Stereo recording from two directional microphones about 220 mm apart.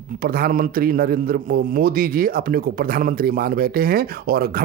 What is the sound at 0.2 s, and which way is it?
A man's voice, 40° right (ahead or behind).